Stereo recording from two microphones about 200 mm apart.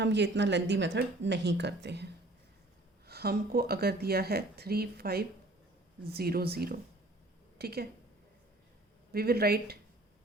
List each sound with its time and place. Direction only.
0.0 s speech: 60° right (ahead or behind)
3.1 s speech: 50° right (ahead or behind)
9.1 s speech: 50° right (ahead or behind)